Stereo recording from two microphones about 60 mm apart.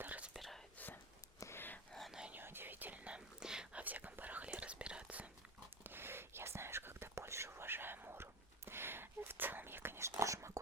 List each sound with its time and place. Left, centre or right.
0.0 s whispering: right
0.3 s whispering: centre
1.5 s whispering: left
1.9 s whispering: centre
2.3 s whispering: right
5.8 s whispering: right